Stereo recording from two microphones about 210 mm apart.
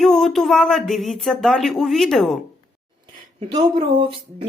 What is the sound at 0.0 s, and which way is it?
Speech, centre (ahead or behind).